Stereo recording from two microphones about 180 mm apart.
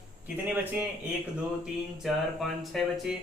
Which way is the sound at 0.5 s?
10° right (ahead or behind).